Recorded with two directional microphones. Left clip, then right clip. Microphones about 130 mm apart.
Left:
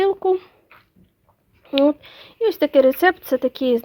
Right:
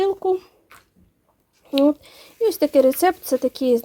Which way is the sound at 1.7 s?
15° right (ahead or behind).